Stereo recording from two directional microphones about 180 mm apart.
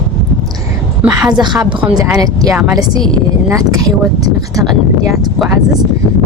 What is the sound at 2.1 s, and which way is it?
Speech, 20° right (ahead or behind).